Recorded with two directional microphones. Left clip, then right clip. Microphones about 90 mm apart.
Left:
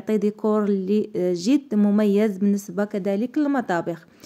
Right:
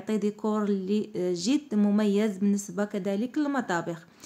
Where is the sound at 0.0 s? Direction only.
40° left (ahead or behind).